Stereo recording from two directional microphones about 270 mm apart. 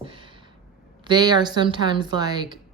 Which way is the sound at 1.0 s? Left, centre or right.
Centre.